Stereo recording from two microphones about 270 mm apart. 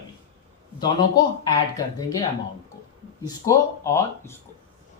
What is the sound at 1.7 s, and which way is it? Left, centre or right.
Speech, centre.